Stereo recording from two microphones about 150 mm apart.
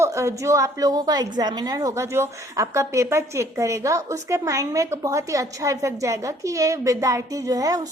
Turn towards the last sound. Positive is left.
turn(degrees=-25)  # may be behind; listen again after turning